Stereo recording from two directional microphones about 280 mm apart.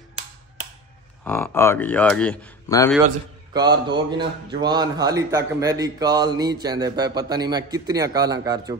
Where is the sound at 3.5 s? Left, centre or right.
Centre.